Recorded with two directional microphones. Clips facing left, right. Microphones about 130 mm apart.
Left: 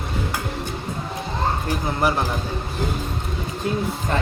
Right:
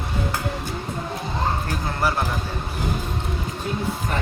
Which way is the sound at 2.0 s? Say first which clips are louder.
Left 2 dB; 15° left (ahead or behind).